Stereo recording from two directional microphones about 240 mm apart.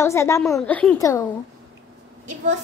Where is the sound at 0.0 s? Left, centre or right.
Centre.